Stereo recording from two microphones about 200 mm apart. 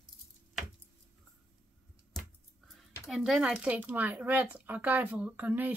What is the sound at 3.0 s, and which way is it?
Speech, centre (ahead or behind).